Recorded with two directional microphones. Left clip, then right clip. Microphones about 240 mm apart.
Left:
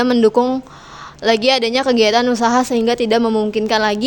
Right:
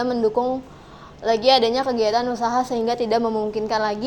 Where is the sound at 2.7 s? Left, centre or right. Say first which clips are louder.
Left 5 dB; left.